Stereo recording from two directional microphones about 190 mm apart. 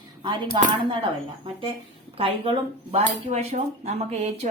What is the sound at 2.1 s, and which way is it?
A woman's voice, 30° right (ahead or behind).